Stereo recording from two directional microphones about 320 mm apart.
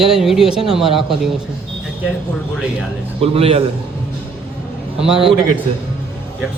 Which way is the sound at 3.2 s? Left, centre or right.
Centre.